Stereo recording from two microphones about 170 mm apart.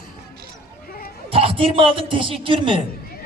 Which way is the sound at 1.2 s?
30° right (ahead or behind).